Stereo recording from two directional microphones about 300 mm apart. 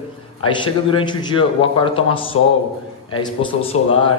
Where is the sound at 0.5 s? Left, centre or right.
Centre.